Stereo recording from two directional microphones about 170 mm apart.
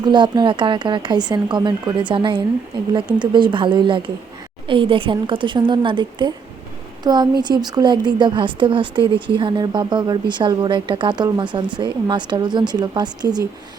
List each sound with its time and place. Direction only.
0.0 s speech: 25° right (ahead or behind)